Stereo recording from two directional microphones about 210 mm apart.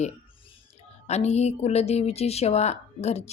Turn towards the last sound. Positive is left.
turn(degrees=30)  # may be behind; listen again after turning